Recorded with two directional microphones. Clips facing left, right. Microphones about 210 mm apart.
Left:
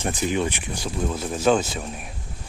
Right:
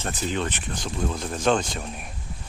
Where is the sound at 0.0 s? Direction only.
10° left (ahead or behind).